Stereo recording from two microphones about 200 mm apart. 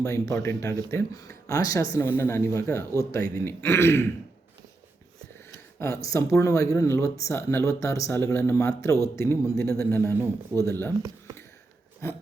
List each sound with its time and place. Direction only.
0.0 s speech: 15° left (ahead or behind)
5.8 s speech: 15° left (ahead or behind)
10.2 s speech: 15° right (ahead or behind)
10.7 s speech: 10° left (ahead or behind)
12.0 s speech: 15° left (ahead or behind)